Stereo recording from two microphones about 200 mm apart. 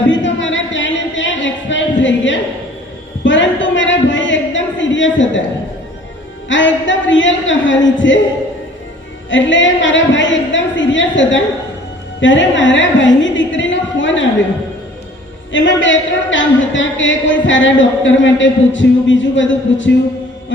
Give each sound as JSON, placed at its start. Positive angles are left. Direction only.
{"t": 0.1, "sound": "music", "side_deg": 65}
{"t": 3.2, "sound": "a sound", "side_deg": 65}
{"t": 6.5, "sound": "a woman's voice", "side_deg": 65}
{"t": 9.3, "sound": "a woman's voice", "side_deg": 65}
{"t": 15.5, "sound": "a woman's voice", "side_deg": 65}